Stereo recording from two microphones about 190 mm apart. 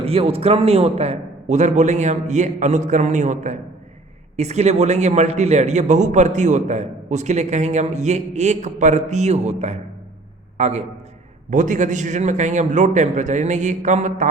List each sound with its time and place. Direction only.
0.0 s a man's voice: 30° right (ahead or behind)